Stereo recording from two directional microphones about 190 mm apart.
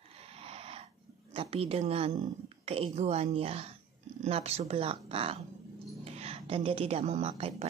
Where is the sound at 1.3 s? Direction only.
30° right (ahead or behind).